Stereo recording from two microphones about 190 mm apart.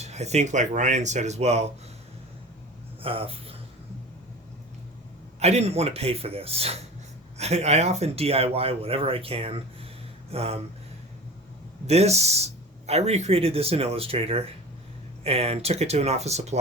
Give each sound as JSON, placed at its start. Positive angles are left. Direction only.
{"t": 0.0, "sound": "speech", "side_deg": -35}
{"t": 3.0, "sound": "speech", "side_deg": -30}
{"t": 5.4, "sound": "speech", "side_deg": -35}
{"t": 11.9, "sound": "speech", "side_deg": -35}